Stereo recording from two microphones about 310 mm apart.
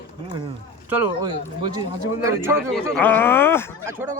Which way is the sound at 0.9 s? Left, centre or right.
Centre.